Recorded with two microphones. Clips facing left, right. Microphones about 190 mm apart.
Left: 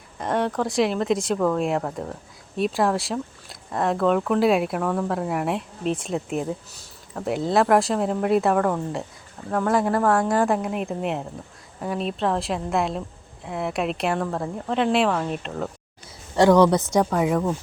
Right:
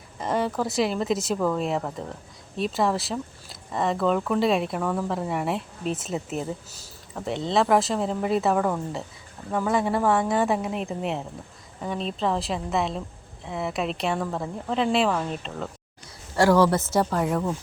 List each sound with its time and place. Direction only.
0.2 s speech: centre (ahead or behind)
16.3 s a woman's voice: 20° left (ahead or behind)
16.8 s speech: 5° right (ahead or behind)